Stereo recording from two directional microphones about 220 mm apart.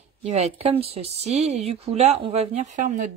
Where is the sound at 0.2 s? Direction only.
30° right (ahead or behind).